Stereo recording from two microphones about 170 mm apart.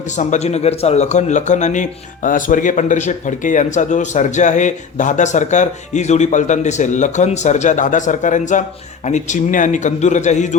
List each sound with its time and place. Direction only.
0.2 s speech: 45° left (ahead or behind)